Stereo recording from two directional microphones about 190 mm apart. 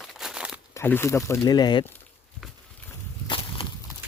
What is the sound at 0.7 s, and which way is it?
Speech, 10° left (ahead or behind).